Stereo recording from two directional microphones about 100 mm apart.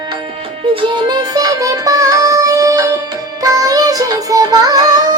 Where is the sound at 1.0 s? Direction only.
40° right (ahead or behind).